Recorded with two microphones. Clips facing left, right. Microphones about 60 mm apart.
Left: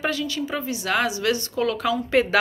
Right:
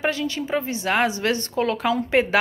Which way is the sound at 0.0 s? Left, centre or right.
Right.